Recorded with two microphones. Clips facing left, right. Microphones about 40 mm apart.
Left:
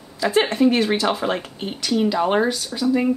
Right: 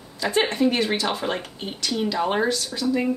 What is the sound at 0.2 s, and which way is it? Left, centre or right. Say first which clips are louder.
Speech: left 4 dB; centre.